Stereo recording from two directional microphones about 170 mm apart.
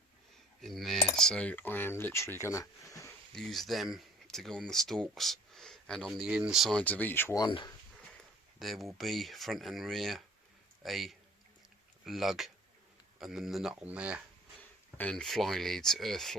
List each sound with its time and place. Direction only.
0.6 s speech: centre (ahead or behind); by 3.1 s 20° left (ahead or behind)
3.3 s speech: centre (ahead or behind)
7.4 s speech: 25° left (ahead or behind)
8.5 s speech: centre (ahead or behind)
14.9 s speech: 5° left (ahead or behind)